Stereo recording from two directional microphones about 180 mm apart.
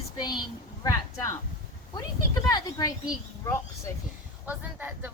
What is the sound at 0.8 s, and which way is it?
Speech, 15° left (ahead or behind).